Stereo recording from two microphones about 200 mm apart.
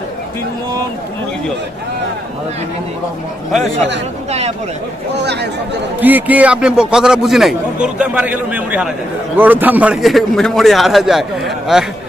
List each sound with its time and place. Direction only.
4.3 s speech: 35° right (ahead or behind)
5.1 s speech: 60° right (ahead or behind)
5.9 s a man's voice: 10° right (ahead or behind)